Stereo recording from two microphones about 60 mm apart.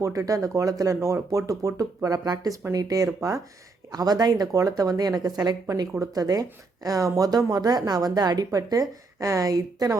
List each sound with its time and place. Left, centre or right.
0.0 s speech: right
1.0 s speech: right
3.2 s speech: right
3.9 s a woman's voice: right